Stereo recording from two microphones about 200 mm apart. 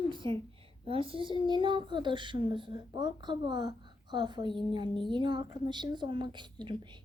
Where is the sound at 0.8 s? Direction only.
25° right (ahead or behind).